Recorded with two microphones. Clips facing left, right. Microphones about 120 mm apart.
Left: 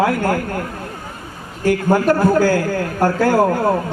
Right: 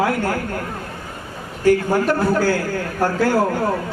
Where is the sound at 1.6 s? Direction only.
45° left (ahead or behind).